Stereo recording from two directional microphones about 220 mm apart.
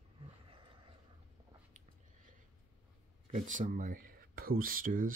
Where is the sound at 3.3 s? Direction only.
35° right (ahead or behind).